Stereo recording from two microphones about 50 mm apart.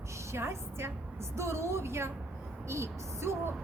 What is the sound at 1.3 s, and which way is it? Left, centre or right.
Speech, right.